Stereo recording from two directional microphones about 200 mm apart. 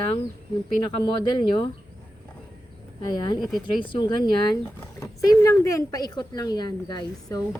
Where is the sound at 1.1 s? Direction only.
20° left (ahead or behind).